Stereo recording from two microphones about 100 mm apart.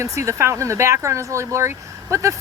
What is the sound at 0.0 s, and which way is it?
Speech, 30° right (ahead or behind).